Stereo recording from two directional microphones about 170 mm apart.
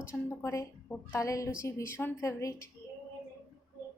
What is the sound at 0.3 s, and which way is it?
A woman's voice, 15° left (ahead or behind).